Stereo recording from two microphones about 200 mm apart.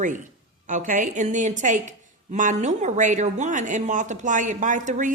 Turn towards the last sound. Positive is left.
turn(degrees=-40)  # may be behind; listen again after turning